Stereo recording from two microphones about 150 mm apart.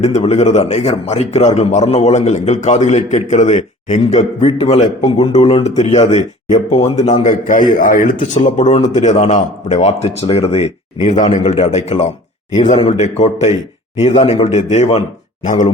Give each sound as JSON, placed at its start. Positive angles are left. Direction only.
{"t": 0.0, "sound": "a man's voice", "side_deg": 45}
{"t": 4.6, "sound": "a man's voice", "side_deg": 40}